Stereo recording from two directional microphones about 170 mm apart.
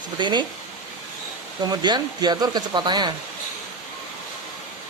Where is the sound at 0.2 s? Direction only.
25° right (ahead or behind).